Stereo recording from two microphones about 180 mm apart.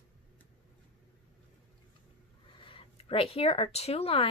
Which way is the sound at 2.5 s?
30° left (ahead or behind).